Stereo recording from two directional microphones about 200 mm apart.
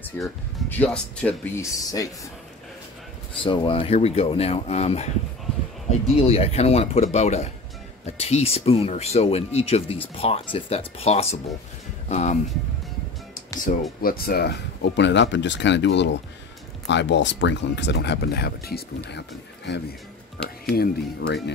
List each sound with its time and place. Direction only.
0.0 s speech: 10° left (ahead or behind)
3.4 s speech: 25° left (ahead or behind)
6.1 s speech: 30° left (ahead or behind)
13.7 s speech: 40° left (ahead or behind)